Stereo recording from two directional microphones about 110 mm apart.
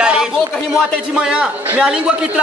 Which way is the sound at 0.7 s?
10° right (ahead or behind).